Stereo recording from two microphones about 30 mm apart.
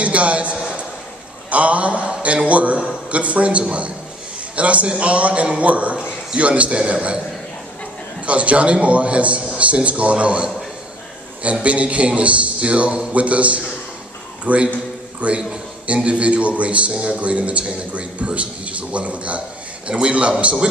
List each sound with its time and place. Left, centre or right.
0.0 s a sound: right
1.5 s a man's voice: right
5.9 s a sound: right
6.4 s a man's voice: right
8.3 s a man's voice: right
11.6 s a man's voice: right